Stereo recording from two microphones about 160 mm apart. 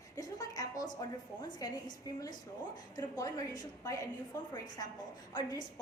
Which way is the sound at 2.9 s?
20° left (ahead or behind).